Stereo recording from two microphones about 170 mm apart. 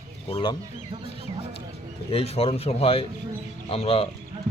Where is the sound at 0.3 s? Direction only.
30° left (ahead or behind).